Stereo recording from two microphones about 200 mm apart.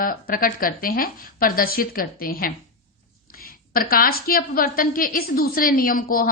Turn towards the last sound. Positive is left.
turn(degrees=45)  # may be behind; listen again after turning